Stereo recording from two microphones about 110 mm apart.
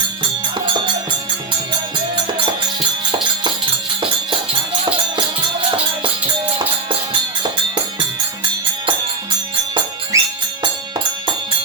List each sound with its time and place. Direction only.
10.1 s music: 30° right (ahead or behind)